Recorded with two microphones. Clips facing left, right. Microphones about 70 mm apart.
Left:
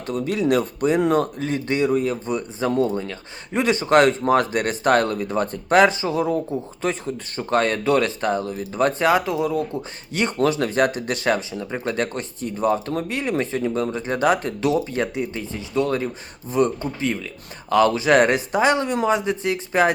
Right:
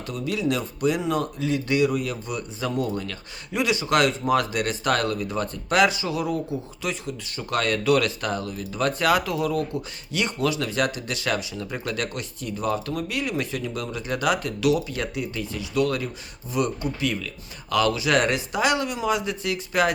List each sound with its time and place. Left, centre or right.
0.1 s speech: left
10.1 s speech: left
11.5 s speech: left